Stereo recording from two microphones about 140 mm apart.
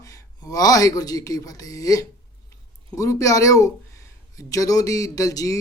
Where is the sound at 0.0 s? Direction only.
25° left (ahead or behind).